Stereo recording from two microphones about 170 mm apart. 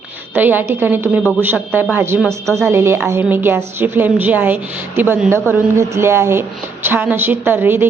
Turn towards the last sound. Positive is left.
turn(degrees=-10)  # may be behind; listen again after turning